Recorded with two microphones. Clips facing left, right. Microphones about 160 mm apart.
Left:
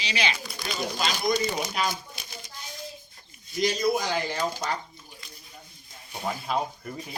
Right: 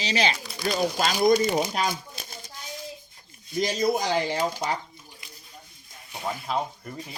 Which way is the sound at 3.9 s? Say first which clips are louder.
Right 2 dB; 35° right (ahead or behind).